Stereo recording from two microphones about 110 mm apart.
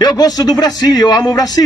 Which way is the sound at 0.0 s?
35° left (ahead or behind).